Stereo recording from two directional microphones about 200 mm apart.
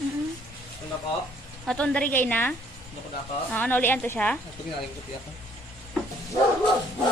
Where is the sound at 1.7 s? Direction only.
5° left (ahead or behind).